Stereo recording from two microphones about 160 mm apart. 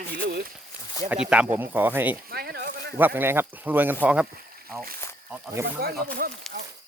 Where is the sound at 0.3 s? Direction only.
80° right.